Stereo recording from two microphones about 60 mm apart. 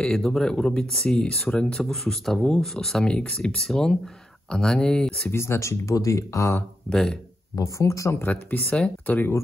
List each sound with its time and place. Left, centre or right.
0.0 s speech: centre
5.3 s speech: left
6.9 s speech: centre
7.5 s speech: left
8.3 s speech: left